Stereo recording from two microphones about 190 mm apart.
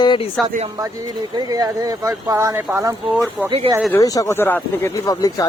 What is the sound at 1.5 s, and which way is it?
Speech, 20° right (ahead or behind).